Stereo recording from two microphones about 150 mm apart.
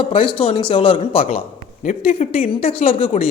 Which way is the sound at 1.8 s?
60° left (ahead or behind).